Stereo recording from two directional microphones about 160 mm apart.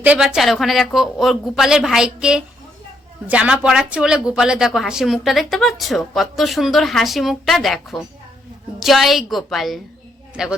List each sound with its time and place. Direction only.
0.0 s speech: 5° right (ahead or behind)